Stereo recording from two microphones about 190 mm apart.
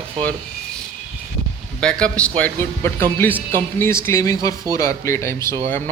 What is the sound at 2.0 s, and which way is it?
Speech, 5° left (ahead or behind).